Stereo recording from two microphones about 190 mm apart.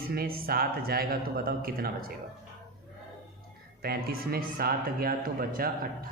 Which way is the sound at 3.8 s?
55° right (ahead or behind).